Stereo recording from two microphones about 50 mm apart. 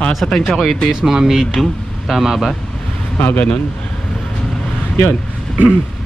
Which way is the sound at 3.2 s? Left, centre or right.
Left.